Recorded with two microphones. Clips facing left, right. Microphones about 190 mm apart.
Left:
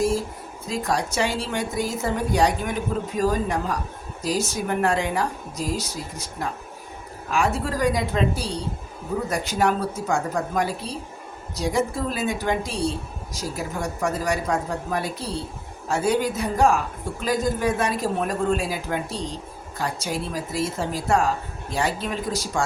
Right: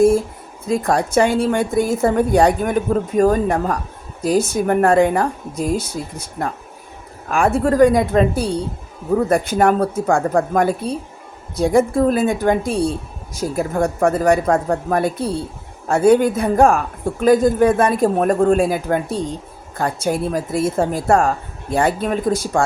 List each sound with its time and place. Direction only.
0.7 s speech: 55° right (ahead or behind)